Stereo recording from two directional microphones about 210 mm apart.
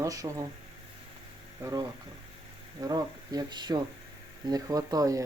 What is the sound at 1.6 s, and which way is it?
Speech, 20° right (ahead or behind).